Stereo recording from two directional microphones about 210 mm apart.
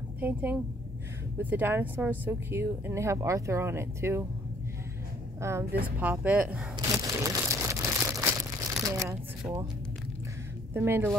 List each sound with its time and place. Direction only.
0.2 s speech: 10° right (ahead or behind)
5.4 s speech: 15° right (ahead or behind)
5.9 s crumpling: 10° right (ahead or behind)
8.8 s speech: 15° right (ahead or behind)
10.7 s speech: 10° right (ahead or behind)